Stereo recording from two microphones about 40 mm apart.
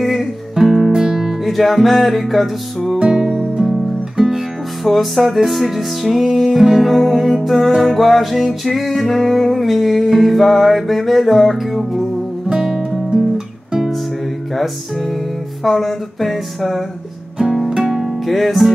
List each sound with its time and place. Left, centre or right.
0.0 s music: centre
1.4 s music: centre
3.0 s music: right
4.8 s music: centre
12.4 s music: centre
15.6 s music: centre
17.4 s music: centre
18.2 s music: centre